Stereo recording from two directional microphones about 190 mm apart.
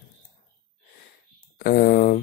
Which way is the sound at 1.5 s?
50° left (ahead or behind).